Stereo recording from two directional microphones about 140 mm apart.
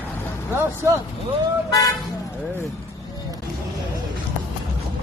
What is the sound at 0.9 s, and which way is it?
Speech, 20° right (ahead or behind).